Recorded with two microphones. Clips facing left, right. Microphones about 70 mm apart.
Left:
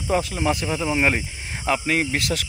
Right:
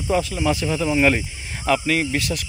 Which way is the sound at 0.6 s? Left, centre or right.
Left.